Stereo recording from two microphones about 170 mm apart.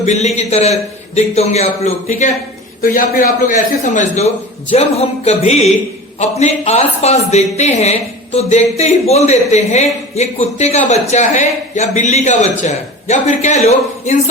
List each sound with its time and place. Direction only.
0.0 s a woman's voice: 40° left (ahead or behind)
2.8 s a man's voice: 55° left (ahead or behind)